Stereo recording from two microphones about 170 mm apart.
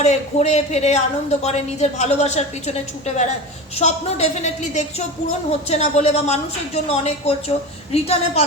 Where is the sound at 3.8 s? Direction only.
40° left (ahead or behind).